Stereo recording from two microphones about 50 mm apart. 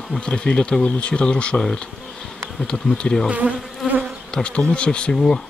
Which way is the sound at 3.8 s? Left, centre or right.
Centre.